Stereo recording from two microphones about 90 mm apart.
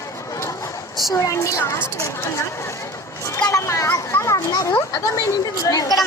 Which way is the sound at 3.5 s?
35° left (ahead or behind).